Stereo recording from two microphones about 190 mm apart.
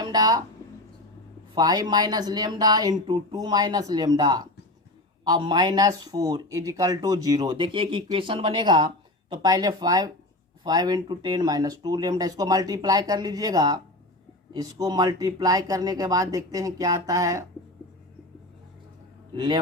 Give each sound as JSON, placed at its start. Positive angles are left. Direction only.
{"t": 0.0, "sound": "speech", "side_deg": -20}
{"t": 1.5, "sound": "speech", "side_deg": -20}